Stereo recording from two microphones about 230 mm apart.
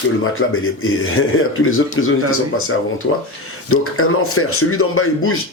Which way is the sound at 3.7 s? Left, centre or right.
Left.